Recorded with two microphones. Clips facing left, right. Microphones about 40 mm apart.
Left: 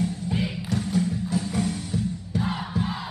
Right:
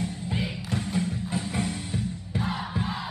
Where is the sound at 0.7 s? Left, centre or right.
Right.